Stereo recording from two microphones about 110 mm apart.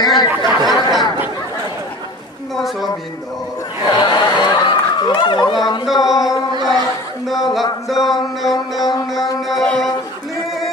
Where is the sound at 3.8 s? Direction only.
40° left (ahead or behind).